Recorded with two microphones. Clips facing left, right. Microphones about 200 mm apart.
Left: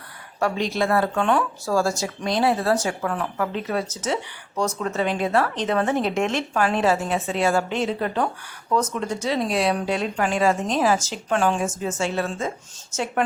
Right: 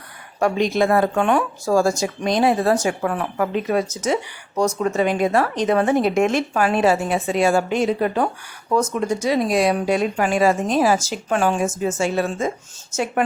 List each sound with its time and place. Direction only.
0.3 s speech: 15° right (ahead or behind)